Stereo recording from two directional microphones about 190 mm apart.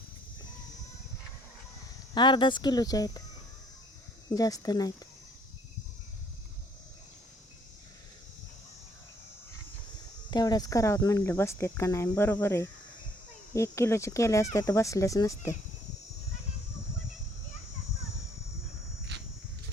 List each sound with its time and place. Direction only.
2.1 s speech: 25° left (ahead or behind)
4.4 s speech: 20° left (ahead or behind)
10.3 s speech: 20° left (ahead or behind)